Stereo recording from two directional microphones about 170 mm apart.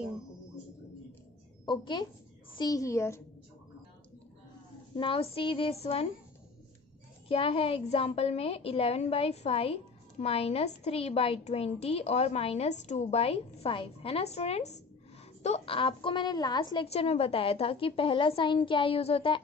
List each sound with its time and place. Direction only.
1.7 s a woman's voice: 25° left (ahead or behind)
4.9 s a woman's voice: 30° left (ahead or behind)
7.2 s a woman's voice: 35° left (ahead or behind)